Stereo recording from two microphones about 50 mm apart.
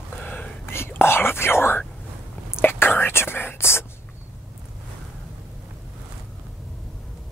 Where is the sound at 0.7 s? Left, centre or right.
Left.